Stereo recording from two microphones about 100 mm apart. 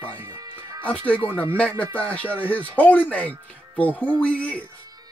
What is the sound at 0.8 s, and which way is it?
Speech, 15° left (ahead or behind).